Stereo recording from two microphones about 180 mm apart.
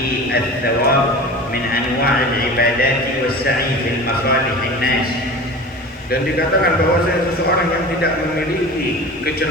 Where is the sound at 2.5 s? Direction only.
55° left (ahead or behind).